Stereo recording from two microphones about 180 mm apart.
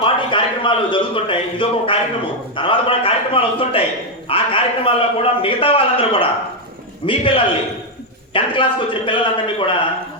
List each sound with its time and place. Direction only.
0.0 s a man's voice: 30° left (ahead or behind)